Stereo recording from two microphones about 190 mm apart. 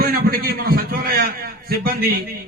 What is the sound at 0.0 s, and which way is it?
A man's voice, 50° right (ahead or behind).